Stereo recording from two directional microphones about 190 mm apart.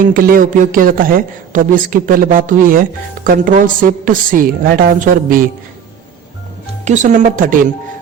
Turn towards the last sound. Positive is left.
turn(degrees=-45)  # may be behind; listen again after turning